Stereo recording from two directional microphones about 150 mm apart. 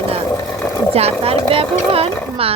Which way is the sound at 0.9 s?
40° right (ahead or behind).